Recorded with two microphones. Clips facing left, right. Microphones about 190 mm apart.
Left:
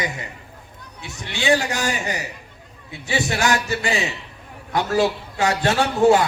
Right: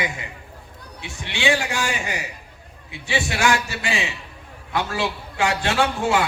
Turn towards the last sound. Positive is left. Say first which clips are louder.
# left 5 dB
turn(degrees=40)  # may be behind; listen again after turning